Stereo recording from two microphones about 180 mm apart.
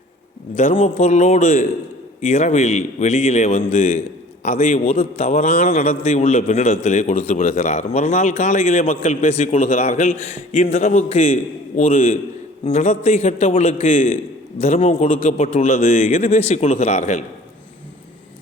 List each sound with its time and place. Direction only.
0.5 s a man's voice: 35° left (ahead or behind)